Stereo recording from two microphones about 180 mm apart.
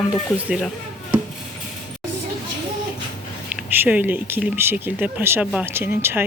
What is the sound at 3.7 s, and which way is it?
Speech, 10° right (ahead or behind).